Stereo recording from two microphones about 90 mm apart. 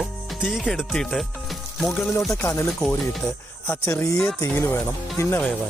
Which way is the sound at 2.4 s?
30° left (ahead or behind).